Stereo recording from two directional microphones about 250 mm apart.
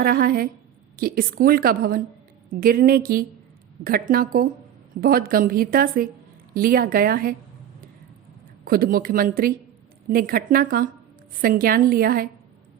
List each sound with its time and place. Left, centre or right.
0.0 s a woman's voice: right
8.6 s a woman's voice: right